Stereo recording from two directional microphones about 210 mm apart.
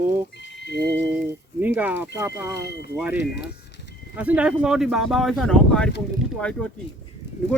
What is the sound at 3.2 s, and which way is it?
Speech, 50° left (ahead or behind).